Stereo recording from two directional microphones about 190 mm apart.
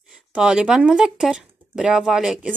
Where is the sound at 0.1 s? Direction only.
5° right (ahead or behind).